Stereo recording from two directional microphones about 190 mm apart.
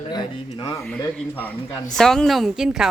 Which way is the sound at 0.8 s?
5° left (ahead or behind).